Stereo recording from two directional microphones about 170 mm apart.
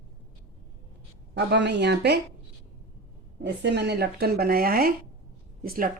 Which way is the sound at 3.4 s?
85° right.